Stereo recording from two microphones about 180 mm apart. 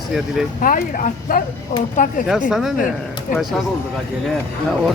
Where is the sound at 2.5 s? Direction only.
Centre (ahead or behind).